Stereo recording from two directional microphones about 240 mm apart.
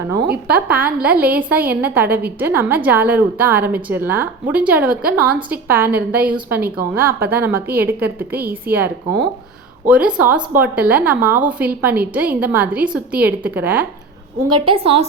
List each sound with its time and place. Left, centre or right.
0.4 s a woman's voice: centre
14.5 s a woman's voice: right